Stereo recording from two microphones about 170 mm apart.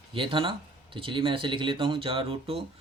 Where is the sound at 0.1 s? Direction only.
30° right (ahead or behind).